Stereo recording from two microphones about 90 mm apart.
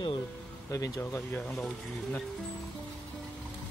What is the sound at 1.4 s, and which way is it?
Speech, 5° left (ahead or behind).